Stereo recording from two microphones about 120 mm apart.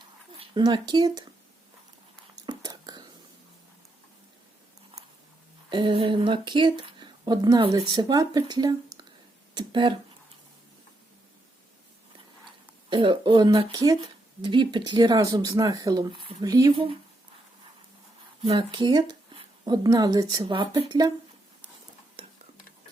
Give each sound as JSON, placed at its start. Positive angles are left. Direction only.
{"t": 0.3, "sound": "speech", "side_deg": -40}
{"t": 2.5, "sound": "whispering", "side_deg": -35}
{"t": 5.7, "sound": "speech", "side_deg": -45}
{"t": 12.9, "sound": "speech", "side_deg": -45}
{"t": 16.1, "sound": "speech", "side_deg": -50}
{"t": 16.4, "sound": "speech", "side_deg": -30}
{"t": 18.4, "sound": "speech", "side_deg": -40}
{"t": 20.4, "sound": "speech", "side_deg": -45}